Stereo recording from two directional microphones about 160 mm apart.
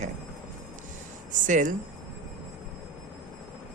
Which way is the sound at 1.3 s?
50° right (ahead or behind).